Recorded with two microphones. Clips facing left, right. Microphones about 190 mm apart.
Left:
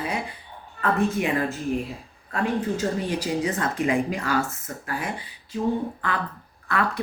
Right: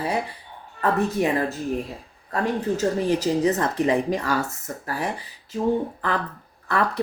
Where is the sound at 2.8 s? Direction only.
35° right (ahead or behind).